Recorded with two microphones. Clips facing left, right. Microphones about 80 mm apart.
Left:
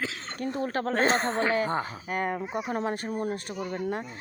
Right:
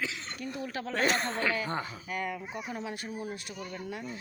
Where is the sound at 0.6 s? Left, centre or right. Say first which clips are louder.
Left 8 dB; left.